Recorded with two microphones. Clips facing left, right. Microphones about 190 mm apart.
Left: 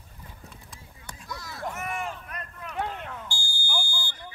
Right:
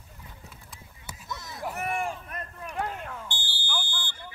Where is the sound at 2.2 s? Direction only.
25° right (ahead or behind).